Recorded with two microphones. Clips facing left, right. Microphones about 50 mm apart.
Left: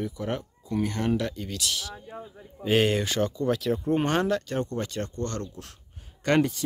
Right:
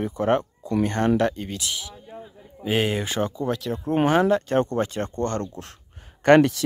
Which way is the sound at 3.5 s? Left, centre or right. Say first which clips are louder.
Left 1 dB; centre.